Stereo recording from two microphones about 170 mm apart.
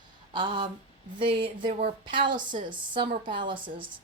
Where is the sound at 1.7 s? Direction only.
40° right (ahead or behind).